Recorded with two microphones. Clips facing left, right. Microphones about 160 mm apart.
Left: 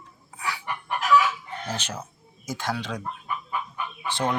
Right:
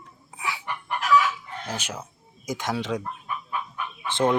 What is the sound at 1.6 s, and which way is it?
Speech, 10° right (ahead or behind).